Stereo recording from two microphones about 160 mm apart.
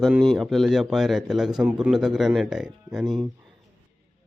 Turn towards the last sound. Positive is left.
turn(degrees=0)  # may be behind; listen again after turning